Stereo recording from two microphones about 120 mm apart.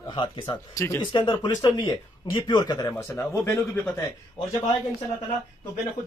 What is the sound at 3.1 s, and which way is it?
Speech, 20° left (ahead or behind).